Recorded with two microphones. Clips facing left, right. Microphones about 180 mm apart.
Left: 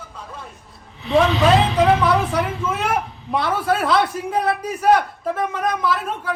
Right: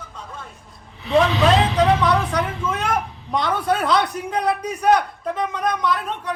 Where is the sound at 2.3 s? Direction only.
5° left (ahead or behind).